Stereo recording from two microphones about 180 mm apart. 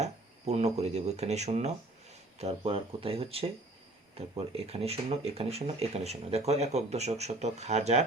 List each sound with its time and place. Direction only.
0.0 s speech: 40° right (ahead or behind)